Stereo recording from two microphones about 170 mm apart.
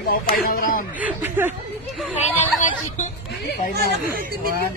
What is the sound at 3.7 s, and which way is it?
Speech, 60° right (ahead or behind).